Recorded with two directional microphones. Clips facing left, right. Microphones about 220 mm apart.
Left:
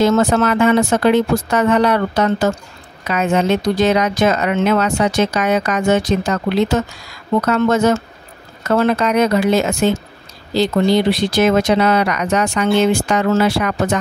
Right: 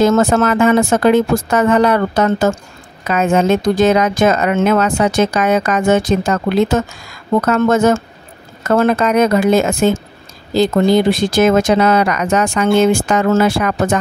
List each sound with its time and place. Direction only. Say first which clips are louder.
0.0 s a woman's voice: right 2 dB; 50° right (ahead or behind)